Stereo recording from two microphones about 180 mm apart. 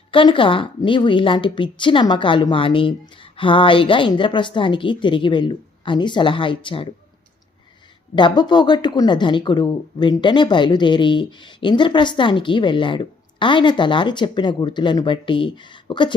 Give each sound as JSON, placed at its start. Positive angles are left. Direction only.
{"t": 0.1, "sound": "speech", "side_deg": 30}
{"t": 8.1, "sound": "speech", "side_deg": 25}